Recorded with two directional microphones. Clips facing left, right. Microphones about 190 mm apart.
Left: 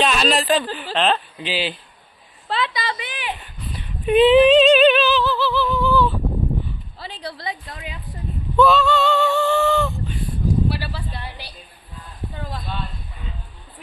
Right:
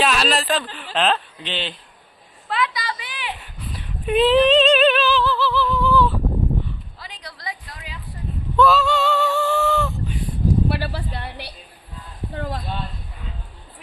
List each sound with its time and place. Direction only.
0.0 s speech: centre (ahead or behind)
2.5 s a sound: 25° left (ahead or behind)
3.7 s female singing: centre (ahead or behind)
5.7 s speech: centre (ahead or behind)
7.0 s a woman's voice: 30° left (ahead or behind)
8.5 s a sound: centre (ahead or behind)
10.7 s a woman's voice: 60° right (ahead or behind)